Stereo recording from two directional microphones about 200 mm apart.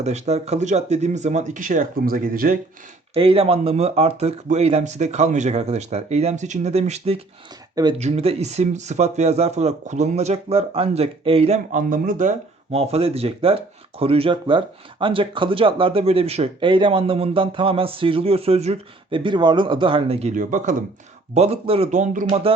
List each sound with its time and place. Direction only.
0.0 s speech: 35° right (ahead or behind)
3.2 s speech: 25° right (ahead or behind)